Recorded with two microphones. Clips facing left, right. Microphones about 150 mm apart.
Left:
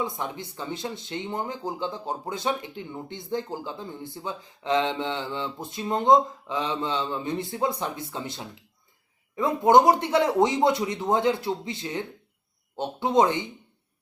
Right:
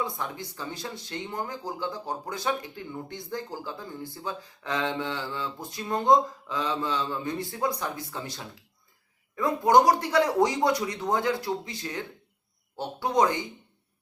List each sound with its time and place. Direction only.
0.0 s speech: 20° left (ahead or behind)